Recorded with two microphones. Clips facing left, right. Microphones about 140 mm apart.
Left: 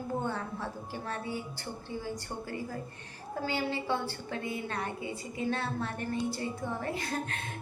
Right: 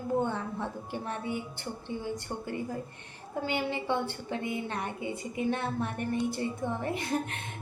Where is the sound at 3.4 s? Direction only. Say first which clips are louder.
Right 1 dB; 20° right (ahead or behind).